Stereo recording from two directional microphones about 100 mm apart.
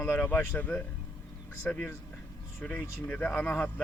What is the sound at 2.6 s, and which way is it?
Speech, 15° left (ahead or behind).